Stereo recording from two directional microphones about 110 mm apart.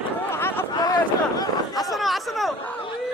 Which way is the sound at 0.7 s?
35° left (ahead or behind).